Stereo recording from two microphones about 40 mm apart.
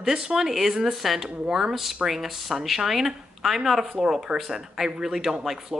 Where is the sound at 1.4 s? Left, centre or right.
Right.